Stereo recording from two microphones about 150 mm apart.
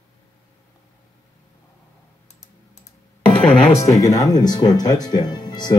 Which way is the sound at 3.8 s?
20° left (ahead or behind).